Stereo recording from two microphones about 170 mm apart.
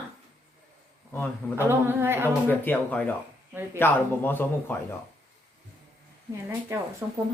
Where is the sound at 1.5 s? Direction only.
15° right (ahead or behind).